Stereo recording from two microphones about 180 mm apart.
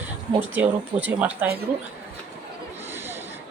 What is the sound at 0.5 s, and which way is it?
Speech, 10° right (ahead or behind).